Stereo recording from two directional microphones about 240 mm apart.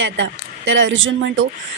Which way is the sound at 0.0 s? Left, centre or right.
Right.